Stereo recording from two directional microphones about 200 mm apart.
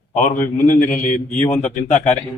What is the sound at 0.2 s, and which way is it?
Speech, 40° left (ahead or behind).